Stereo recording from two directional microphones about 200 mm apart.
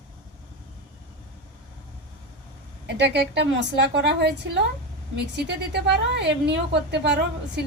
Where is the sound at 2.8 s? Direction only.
55° right (ahead or behind).